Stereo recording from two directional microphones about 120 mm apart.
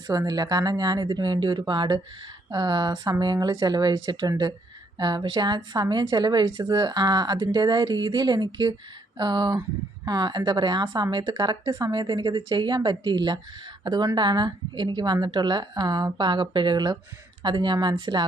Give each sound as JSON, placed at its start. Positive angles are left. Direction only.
{"t": 0.1, "sound": "a woman's voice", "side_deg": -30}